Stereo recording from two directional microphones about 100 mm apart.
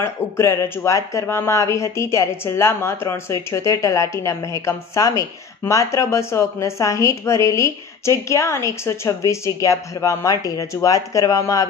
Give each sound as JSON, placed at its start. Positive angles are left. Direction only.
{"t": 0.0, "sound": "speech", "side_deg": 25}